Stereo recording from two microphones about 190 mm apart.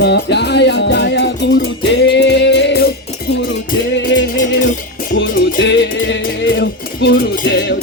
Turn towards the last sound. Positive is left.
turn(degrees=70)  # may be behind; listen again after turning